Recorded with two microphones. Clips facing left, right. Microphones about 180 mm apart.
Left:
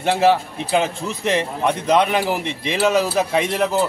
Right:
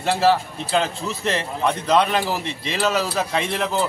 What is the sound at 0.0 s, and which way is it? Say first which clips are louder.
A man's voice: left 2 dB; 15° left (ahead or behind).